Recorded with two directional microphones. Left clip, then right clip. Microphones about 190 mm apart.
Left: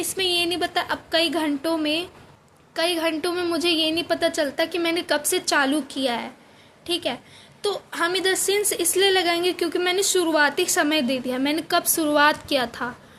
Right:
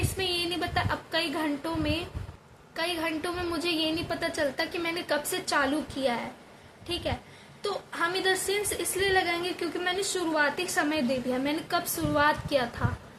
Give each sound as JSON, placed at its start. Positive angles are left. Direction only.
{"t": 0.2, "sound": "a woman's voice", "side_deg": 50}